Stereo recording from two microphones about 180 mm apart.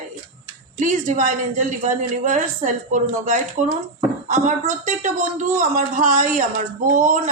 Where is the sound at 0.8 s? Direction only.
45° right (ahead or behind).